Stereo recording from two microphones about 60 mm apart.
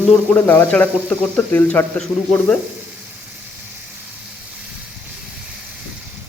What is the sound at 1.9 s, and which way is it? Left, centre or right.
Speech, centre.